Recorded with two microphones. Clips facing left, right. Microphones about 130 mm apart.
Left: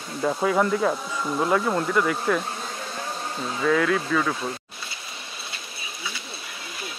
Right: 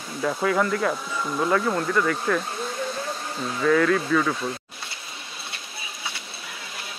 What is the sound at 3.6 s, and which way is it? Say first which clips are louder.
Speech: right 2 dB; 5° left (ahead or behind).